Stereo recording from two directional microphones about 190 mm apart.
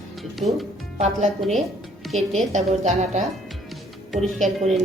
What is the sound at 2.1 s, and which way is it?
Speech, centre (ahead or behind).